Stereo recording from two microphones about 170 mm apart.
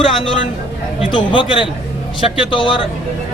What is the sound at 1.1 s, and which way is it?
Speech, 30° left (ahead or behind).